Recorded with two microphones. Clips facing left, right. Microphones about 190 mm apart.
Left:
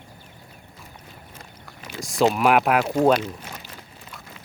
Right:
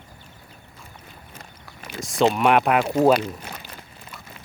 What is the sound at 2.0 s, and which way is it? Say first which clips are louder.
Speech: even; centre (ahead or behind).